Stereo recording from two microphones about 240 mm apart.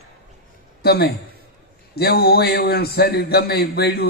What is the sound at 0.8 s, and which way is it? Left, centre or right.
A man's voice, left.